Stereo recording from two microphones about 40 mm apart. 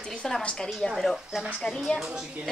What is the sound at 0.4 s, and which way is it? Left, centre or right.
Speech, left.